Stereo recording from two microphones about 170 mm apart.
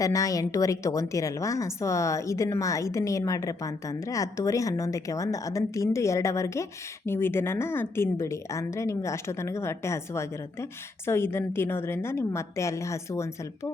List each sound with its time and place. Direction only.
0.0 s a woman's voice: 20° left (ahead or behind)